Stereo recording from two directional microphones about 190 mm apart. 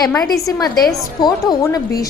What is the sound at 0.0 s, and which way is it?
A woman's voice, 20° left (ahead or behind).